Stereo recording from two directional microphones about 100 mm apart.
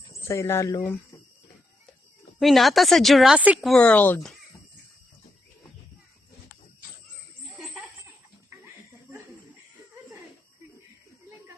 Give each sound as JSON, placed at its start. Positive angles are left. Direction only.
{"t": 0.1, "sound": "speech", "side_deg": 30}
{"t": 2.4, "sound": "a woman's voice", "side_deg": 0}
{"t": 3.3, "sound": "speech", "side_deg": -15}
{"t": 3.6, "sound": "speech", "side_deg": 5}
{"t": 7.6, "sound": "a sound", "side_deg": -5}